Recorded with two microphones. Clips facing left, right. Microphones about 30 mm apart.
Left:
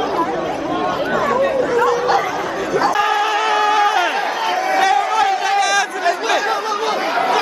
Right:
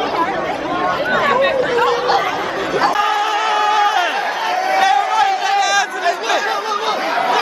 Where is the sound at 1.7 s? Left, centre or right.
Right.